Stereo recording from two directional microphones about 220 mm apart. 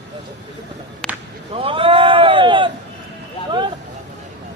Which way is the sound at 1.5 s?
25° right (ahead or behind).